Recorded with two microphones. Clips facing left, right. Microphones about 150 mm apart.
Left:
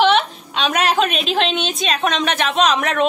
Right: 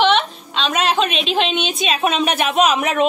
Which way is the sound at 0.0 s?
5° left (ahead or behind).